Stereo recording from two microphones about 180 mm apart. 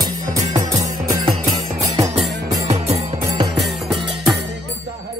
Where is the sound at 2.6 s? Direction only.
35° right (ahead or behind).